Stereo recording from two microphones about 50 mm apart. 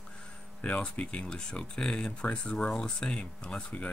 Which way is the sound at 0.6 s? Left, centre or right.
Left.